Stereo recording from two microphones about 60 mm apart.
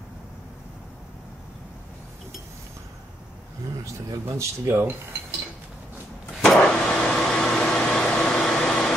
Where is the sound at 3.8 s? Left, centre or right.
Right.